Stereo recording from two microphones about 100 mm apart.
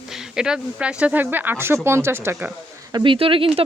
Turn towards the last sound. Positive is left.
turn(degrees=-65)  # may be behind; listen again after turning